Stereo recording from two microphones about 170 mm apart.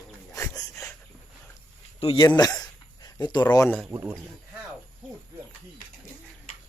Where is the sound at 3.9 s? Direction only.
15° right (ahead or behind).